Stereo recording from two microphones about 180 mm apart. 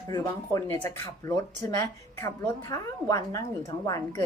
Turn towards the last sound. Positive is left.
turn(degrees=20)  # may be behind; listen again after turning